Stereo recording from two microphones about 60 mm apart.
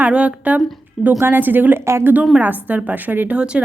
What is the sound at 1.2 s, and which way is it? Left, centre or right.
A woman's voice, right.